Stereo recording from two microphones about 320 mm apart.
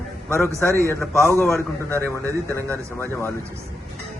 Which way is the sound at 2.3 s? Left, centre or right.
Centre.